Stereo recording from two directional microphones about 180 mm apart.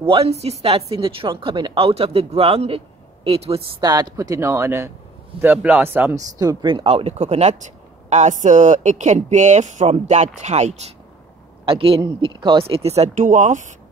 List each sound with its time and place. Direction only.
0.0 s a woman's voice: 30° right (ahead or behind)